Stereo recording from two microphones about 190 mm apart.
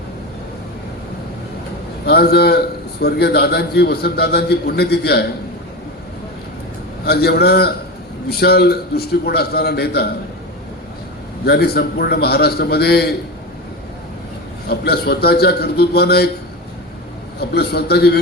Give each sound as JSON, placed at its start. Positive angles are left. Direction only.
{"t": 2.0, "sound": "a man's voice", "side_deg": 55}
{"t": 7.0, "sound": "a man's voice", "side_deg": 55}
{"t": 11.4, "sound": "a man's voice", "side_deg": 55}
{"t": 14.7, "sound": "a man's voice", "side_deg": 55}
{"t": 17.5, "sound": "a man's voice", "side_deg": 55}